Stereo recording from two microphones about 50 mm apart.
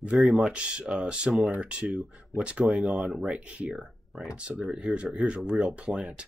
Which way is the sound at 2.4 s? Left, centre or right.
Right.